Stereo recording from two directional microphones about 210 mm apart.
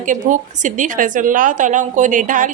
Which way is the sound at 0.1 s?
35° right (ahead or behind).